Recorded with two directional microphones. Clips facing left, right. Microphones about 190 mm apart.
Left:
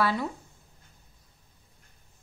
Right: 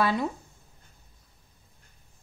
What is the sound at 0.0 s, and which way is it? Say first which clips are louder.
Speech: right 2 dB; 20° right (ahead or behind).